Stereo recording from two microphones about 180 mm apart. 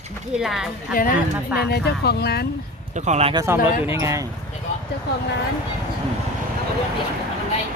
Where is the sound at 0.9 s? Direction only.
50° left (ahead or behind).